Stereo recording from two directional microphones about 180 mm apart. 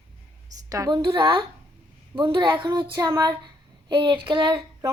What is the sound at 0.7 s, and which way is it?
A child's voice, 20° right (ahead or behind).